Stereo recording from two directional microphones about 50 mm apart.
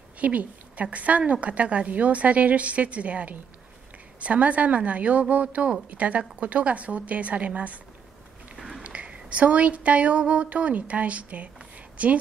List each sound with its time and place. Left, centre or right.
0.2 s a woman's voice: right
8.5 s a sound: centre
8.8 s speech: right